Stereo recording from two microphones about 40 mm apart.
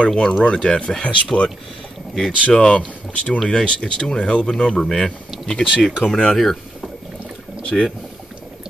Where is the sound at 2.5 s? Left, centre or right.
Left.